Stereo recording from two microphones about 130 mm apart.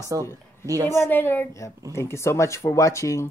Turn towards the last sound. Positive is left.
turn(degrees=25)  # may be behind; listen again after turning